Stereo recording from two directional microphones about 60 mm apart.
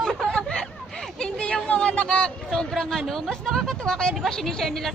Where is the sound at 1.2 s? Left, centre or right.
Centre.